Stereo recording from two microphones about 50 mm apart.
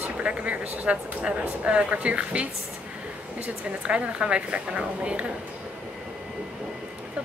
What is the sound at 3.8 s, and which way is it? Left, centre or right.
Speech, centre.